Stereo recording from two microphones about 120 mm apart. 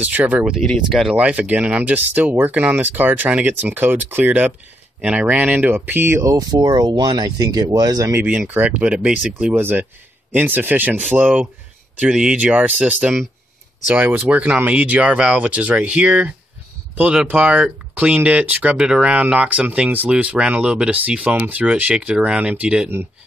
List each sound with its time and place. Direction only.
0.0 s speech: 15° right (ahead or behind)
0.5 s speech: centre (ahead or behind)
1.1 s speech: 10° right (ahead or behind)
6.3 s speech: 35° right (ahead or behind); by 22.8 s 10° right (ahead or behind)